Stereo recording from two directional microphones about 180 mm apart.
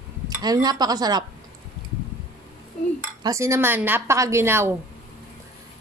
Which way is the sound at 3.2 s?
15° right (ahead or behind).